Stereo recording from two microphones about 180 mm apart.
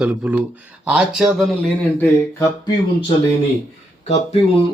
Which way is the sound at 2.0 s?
20° left (ahead or behind).